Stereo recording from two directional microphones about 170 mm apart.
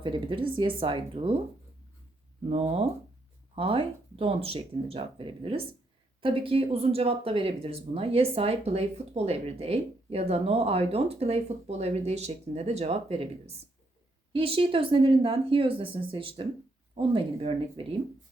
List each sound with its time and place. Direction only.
0.0 s speech: 30° right (ahead or behind)
2.5 s speech: 35° right (ahead or behind)